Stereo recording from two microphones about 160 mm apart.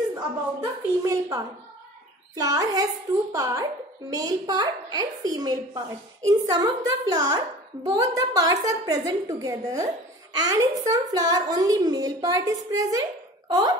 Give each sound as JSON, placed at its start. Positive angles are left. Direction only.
{"t": 0.1, "sound": "a woman's voice", "side_deg": -20}